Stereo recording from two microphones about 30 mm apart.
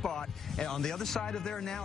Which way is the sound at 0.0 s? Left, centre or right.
Centre.